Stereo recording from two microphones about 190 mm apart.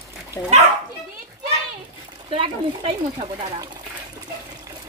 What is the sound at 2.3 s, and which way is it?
Speech, 30° right (ahead or behind).